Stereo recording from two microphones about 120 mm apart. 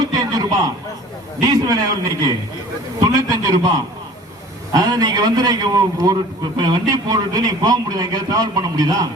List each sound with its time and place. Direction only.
0.0 s a sound: 35° right (ahead or behind)
1.4 s a man's voice: 30° right (ahead or behind)
3.0 s a man's voice: 30° right (ahead or behind)
4.7 s a man's voice: 30° right (ahead or behind)